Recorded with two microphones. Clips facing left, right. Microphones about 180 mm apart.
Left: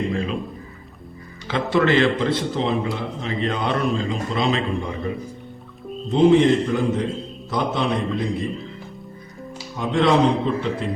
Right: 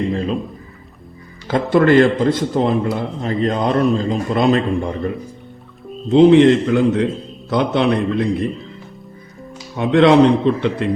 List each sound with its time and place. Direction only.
1.5 s a man's voice: 45° right (ahead or behind)
6.1 s a man's voice: 70° right (ahead or behind)
9.7 s a man's voice: 70° right (ahead or behind)